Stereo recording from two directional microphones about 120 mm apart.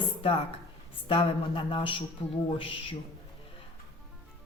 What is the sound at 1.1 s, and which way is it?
A woman's voice, 45° left (ahead or behind).